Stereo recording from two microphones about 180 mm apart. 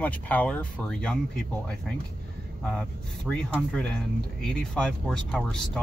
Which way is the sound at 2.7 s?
5° left (ahead or behind).